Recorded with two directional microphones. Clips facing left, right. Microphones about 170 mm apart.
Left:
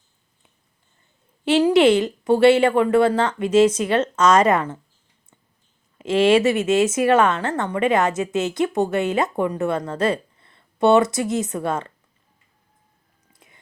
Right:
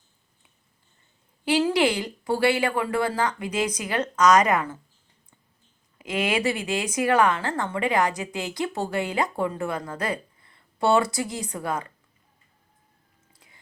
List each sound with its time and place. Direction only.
1.5 s a woman's voice: 25° left (ahead or behind)
6.0 s a sound: 25° left (ahead or behind)
6.3 s a woman's voice: 20° left (ahead or behind)